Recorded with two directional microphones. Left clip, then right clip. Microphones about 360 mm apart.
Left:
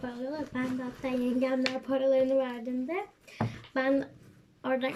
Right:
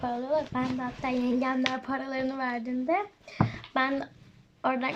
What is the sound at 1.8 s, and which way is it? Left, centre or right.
A child's voice, centre.